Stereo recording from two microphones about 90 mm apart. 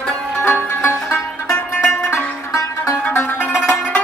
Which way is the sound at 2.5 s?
35° left (ahead or behind).